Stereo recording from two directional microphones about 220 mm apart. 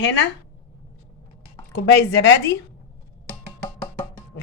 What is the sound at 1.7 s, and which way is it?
Speech, 50° left (ahead or behind).